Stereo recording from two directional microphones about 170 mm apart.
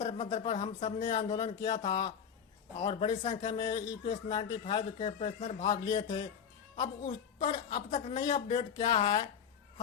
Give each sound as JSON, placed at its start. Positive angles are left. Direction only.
{"t": 0.0, "sound": "a sound", "side_deg": 40}
{"t": 0.3, "sound": "a man's voice", "side_deg": 35}
{"t": 7.9, "sound": "speech", "side_deg": 40}
{"t": 8.2, "sound": "speech", "side_deg": 30}